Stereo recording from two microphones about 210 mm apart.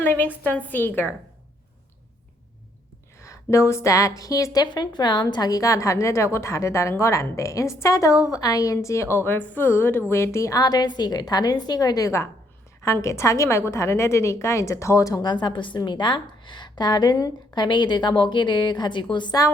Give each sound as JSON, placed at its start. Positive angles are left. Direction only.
{"t": 0.0, "sound": "a woman's voice", "side_deg": 10}
{"t": 3.2, "sound": "a woman's voice", "side_deg": 15}